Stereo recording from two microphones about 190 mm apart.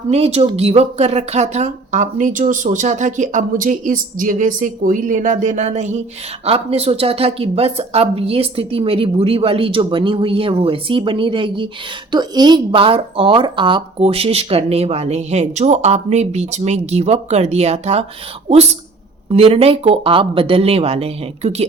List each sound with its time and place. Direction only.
0.1 s a woman's voice: 35° right (ahead or behind)
19.3 s a woman's voice: 30° right (ahead or behind)